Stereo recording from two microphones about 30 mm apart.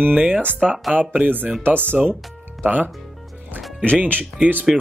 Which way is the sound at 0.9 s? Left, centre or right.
Right.